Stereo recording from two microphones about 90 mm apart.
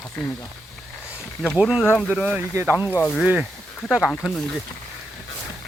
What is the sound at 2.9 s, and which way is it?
Speech, 25° left (ahead or behind).